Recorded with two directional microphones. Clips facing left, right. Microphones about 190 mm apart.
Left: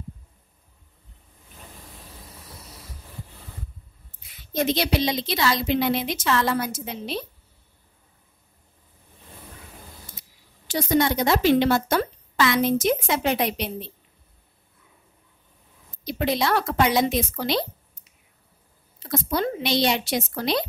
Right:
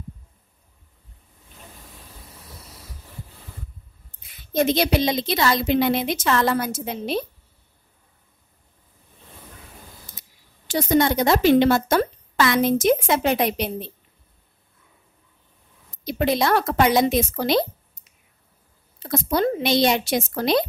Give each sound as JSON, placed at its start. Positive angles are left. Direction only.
{"t": 4.6, "sound": "speech", "side_deg": -50}
{"t": 10.7, "sound": "speech", "side_deg": -50}
{"t": 16.0, "sound": "speech", "side_deg": -50}
{"t": 19.0, "sound": "speech", "side_deg": -45}